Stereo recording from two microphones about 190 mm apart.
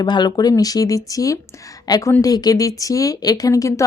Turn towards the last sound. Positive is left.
turn(degrees=15)  # may be behind; listen again after turning